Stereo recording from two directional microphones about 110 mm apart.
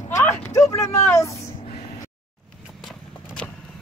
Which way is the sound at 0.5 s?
30° left (ahead or behind).